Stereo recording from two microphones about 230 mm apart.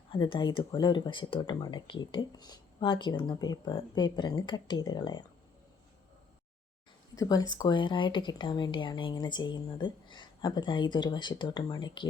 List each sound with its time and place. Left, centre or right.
0.1 s speech: left
7.2 s speech: centre